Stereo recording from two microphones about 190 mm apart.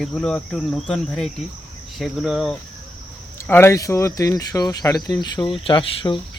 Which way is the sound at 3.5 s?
15° left (ahead or behind).